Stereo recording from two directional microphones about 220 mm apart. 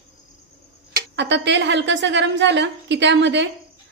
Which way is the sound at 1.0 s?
50° right (ahead or behind).